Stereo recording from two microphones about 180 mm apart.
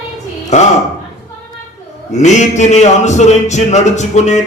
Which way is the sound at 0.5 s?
40° left (ahead or behind).